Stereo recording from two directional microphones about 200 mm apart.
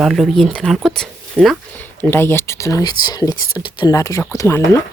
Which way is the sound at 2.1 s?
10° left (ahead or behind).